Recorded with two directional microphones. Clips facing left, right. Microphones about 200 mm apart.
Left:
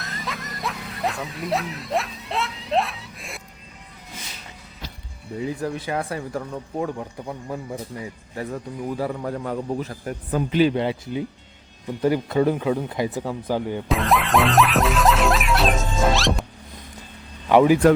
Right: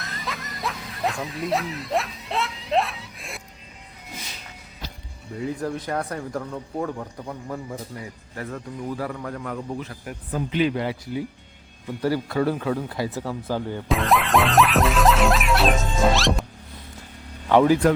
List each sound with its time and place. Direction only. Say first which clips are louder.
0.0 s snicker: left 1 dB; centre (ahead or behind)
5.5 s speech: left 1 dB; 5° left (ahead or behind); by 10.8 s 35° left (ahead or behind)
10.8 s speech: left 3 dB; 25° left (ahead or behind)
13.8 s music: right 2 dB; centre (ahead or behind)
17.5 s speech: left 2 dB; 15° left (ahead or behind)